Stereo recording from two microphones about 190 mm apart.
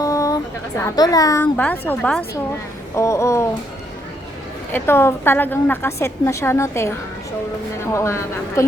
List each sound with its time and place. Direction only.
0.0 s a sound: 15° left (ahead or behind)
0.8 s a woman's voice: 20° left (ahead or behind)
4.7 s a woman's voice: 10° left (ahead or behind)
7.9 s a woman's voice: 15° left (ahead or behind)